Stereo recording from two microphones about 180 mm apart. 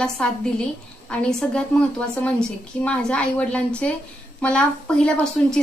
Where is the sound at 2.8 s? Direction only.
5° left (ahead or behind).